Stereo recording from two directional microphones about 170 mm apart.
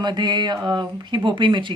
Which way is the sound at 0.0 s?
25° right (ahead or behind).